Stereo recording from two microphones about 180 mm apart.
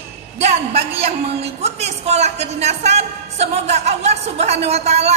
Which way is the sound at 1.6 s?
35° right (ahead or behind).